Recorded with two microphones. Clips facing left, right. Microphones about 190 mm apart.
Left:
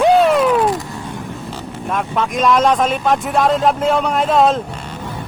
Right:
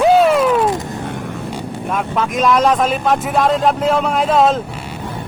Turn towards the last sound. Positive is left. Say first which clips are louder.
# even
turn(degrees=0)  # may be behind; listen again after turning